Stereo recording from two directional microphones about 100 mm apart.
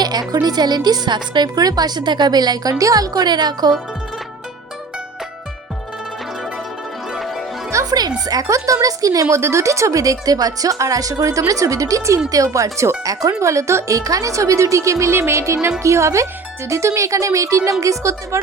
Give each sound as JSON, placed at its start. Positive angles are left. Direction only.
{"t": 0.0, "sound": "a woman's voice", "side_deg": -40}
{"t": 7.1, "sound": "music", "side_deg": 0}
{"t": 7.7, "sound": "music", "side_deg": -35}
{"t": 8.3, "sound": "speech", "side_deg": -35}